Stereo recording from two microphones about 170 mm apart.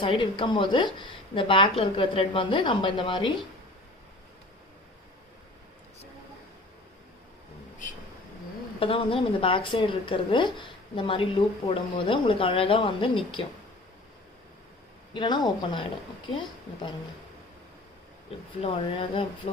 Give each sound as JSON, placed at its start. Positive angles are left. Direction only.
{"t": 0.0, "sound": "a woman's voice", "side_deg": 30}
{"t": 8.8, "sound": "speech", "side_deg": 30}
{"t": 15.1, "sound": "a woman's voice", "side_deg": 25}
{"t": 18.6, "sound": "speech", "side_deg": 30}